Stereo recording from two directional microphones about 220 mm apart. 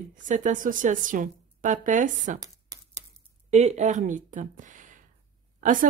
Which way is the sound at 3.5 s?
30° right (ahead or behind).